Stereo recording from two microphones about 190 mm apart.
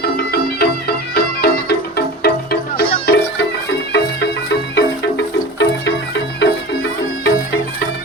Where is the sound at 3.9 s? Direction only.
65° left (ahead or behind).